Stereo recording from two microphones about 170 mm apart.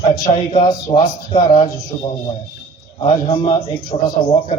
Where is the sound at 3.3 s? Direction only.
25° left (ahead or behind).